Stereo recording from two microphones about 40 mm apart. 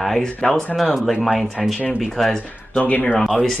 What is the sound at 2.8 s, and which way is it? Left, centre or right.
Speech, left.